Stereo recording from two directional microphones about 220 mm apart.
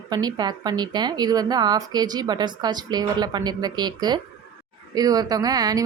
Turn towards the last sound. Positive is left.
turn(degrees=-15)  # may be behind; listen again after turning